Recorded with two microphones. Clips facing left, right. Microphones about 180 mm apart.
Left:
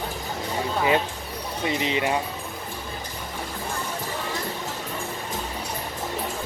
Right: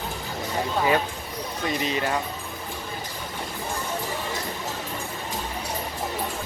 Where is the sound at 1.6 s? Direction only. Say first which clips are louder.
Left 2 dB; 20° left (ahead or behind).